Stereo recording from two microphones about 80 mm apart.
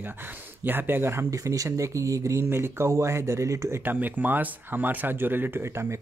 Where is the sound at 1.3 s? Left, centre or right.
Right.